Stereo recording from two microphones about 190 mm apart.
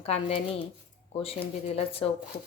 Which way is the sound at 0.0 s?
30° left (ahead or behind).